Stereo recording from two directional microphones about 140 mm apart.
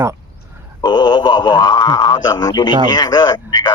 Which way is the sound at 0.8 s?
30° left (ahead or behind).